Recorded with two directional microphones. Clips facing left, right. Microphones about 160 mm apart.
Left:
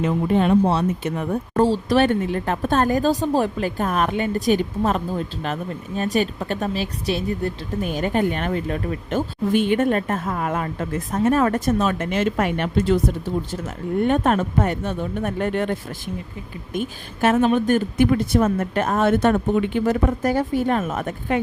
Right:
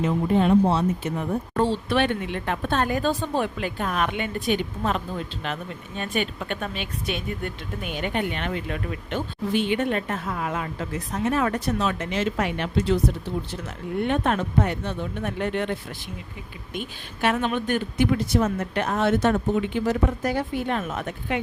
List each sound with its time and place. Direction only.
0.0 s speech: 65° left (ahead or behind)
1.5 s speech: 40° left (ahead or behind)